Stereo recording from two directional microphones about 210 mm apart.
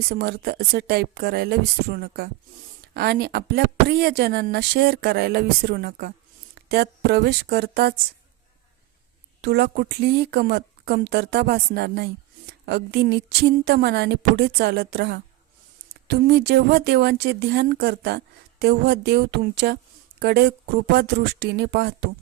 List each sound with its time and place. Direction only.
0.1 s speech: 45° right (ahead or behind)
9.4 s speech: 50° right (ahead or behind)